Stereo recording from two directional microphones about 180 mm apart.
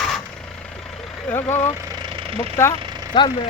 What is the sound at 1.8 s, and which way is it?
Vehicle, 20° right (ahead or behind).